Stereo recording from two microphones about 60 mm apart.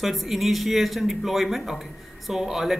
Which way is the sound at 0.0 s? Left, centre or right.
Centre.